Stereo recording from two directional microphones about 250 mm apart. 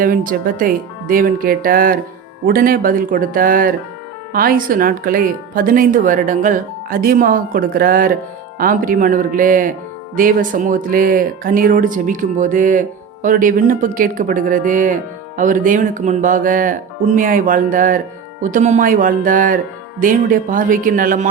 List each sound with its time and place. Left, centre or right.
0.0 s speech: right